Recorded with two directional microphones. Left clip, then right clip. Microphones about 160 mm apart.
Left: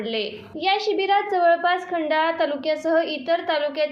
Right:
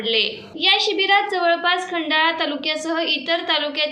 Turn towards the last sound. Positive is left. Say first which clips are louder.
# right 2 dB
turn(degrees=45)  # may be behind; listen again after turning